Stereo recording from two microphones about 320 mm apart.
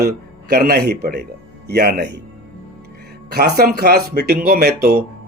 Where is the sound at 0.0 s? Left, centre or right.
Right.